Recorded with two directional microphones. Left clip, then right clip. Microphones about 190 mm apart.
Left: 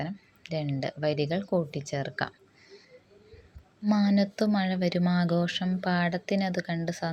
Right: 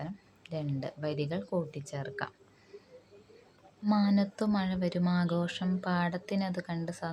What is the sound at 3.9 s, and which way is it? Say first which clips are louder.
A woman's voice: left 3 dB; 20° left (ahead or behind).